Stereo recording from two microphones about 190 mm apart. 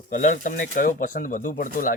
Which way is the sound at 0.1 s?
40° left (ahead or behind).